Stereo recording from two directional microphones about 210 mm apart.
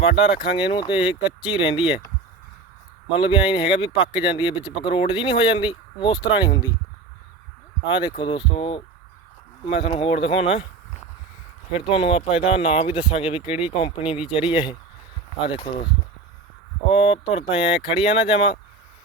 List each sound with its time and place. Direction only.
0.0 s speech: 25° left (ahead or behind)
3.1 s speech: 25° left (ahead or behind)
7.9 s speech: 20° left (ahead or behind)
11.9 s speech: 25° left (ahead or behind)
16.9 s speech: 25° left (ahead or behind)